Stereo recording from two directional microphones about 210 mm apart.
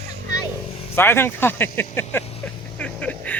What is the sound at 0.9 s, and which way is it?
Speech, 10° left (ahead or behind).